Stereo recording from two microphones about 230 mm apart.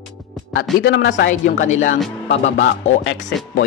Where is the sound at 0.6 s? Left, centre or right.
Left.